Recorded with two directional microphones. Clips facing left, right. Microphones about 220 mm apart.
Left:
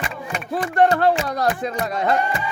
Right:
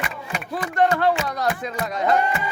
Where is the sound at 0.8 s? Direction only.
40° left (ahead or behind).